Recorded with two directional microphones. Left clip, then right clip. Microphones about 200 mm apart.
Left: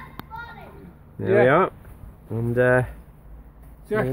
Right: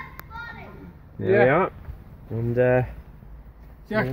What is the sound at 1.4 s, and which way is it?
Speech, 15° left (ahead or behind).